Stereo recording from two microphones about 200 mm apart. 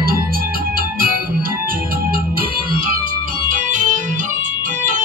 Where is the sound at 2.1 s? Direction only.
45° right (ahead or behind).